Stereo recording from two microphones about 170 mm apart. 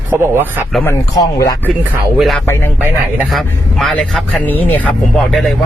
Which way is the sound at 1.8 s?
10° right (ahead or behind).